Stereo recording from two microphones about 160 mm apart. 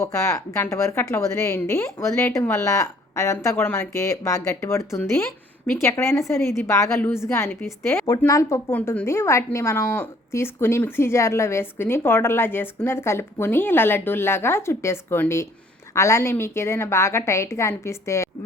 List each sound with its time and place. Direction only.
0.0 s a woman's voice: 20° left (ahead or behind)